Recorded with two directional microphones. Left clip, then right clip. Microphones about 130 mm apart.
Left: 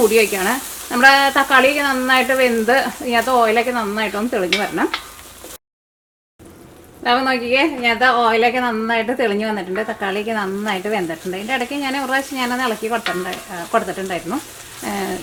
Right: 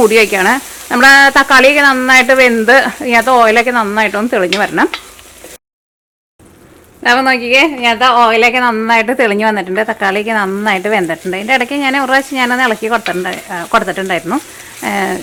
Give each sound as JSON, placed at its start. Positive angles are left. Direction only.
{"t": 0.1, "sound": "speech", "side_deg": -35}
{"t": 7.0, "sound": "speech", "side_deg": -35}
{"t": 14.8, "sound": "a sound", "side_deg": -30}